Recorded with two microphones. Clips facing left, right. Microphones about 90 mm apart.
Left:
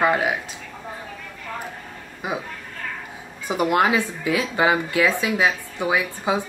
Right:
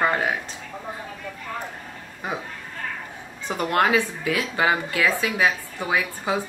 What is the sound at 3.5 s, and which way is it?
Speech, 10° left (ahead or behind).